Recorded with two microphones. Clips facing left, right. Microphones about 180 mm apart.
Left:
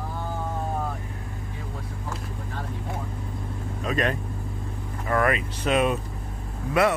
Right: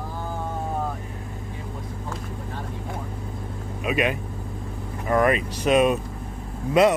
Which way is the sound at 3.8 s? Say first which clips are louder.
Right 2 dB; 10° right (ahead or behind).